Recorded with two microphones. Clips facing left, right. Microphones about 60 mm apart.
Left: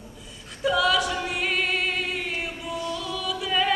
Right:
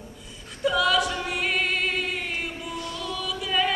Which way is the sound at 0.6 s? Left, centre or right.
Centre.